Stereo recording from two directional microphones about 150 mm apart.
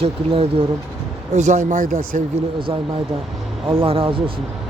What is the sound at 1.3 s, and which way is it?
Speech, 55° right (ahead or behind).